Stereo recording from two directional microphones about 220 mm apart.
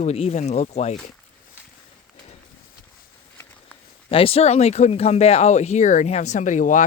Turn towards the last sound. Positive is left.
turn(degrees=35)  # may be behind; listen again after turning